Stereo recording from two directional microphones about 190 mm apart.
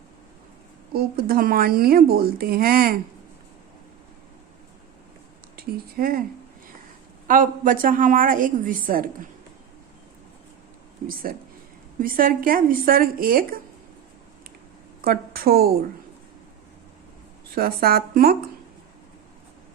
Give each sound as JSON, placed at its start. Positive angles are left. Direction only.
{"t": 0.9, "sound": "speech", "side_deg": -55}
{"t": 5.5, "sound": "speech", "side_deg": -50}
{"t": 7.3, "sound": "speech", "side_deg": -45}
{"t": 11.0, "sound": "speech", "side_deg": -50}
{"t": 15.0, "sound": "speech", "side_deg": -50}
{"t": 17.5, "sound": "speech", "side_deg": -55}